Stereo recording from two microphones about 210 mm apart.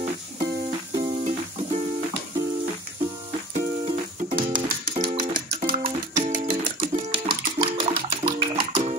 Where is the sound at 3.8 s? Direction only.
25° right (ahead or behind).